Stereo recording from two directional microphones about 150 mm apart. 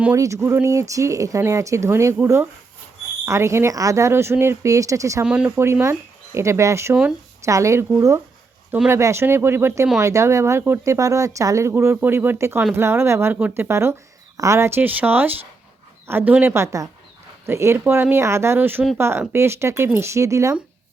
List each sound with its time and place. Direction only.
0.0 s speech: 20° right (ahead or behind)
5.2 s speech: 5° right (ahead or behind)